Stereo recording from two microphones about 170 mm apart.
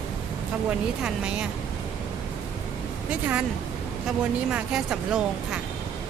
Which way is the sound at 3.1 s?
5° right (ahead or behind).